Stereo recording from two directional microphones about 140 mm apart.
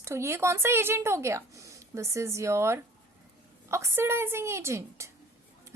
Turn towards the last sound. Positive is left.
turn(degrees=-20)  # may be behind; listen again after turning